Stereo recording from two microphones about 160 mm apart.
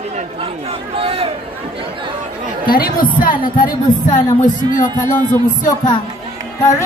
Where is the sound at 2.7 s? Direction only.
65° left (ahead or behind).